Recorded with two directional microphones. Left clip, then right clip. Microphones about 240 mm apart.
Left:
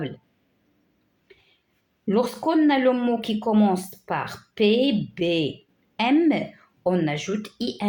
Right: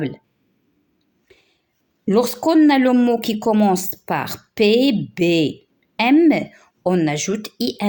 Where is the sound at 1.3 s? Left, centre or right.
Right.